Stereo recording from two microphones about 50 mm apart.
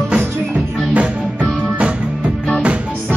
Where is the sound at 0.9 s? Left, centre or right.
Right.